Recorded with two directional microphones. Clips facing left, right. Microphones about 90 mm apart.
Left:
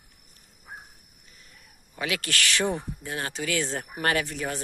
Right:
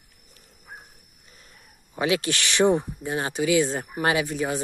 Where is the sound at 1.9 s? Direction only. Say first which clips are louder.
Right 6 dB; 20° right (ahead or behind).